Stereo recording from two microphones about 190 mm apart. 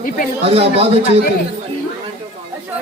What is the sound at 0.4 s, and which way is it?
Speech, 30° right (ahead or behind).